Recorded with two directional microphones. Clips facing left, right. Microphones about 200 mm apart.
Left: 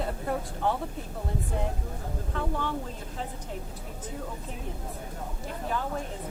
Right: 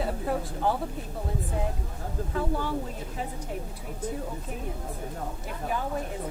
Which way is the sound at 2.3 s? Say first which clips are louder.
Right 2 dB; 10° right (ahead or behind).